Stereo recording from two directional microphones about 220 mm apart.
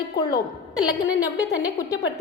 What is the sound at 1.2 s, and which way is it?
Speech, 15° left (ahead or behind).